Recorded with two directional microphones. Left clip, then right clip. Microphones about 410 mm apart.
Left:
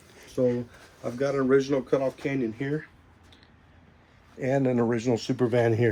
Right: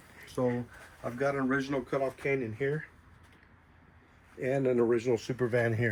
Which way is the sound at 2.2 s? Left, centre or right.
Left.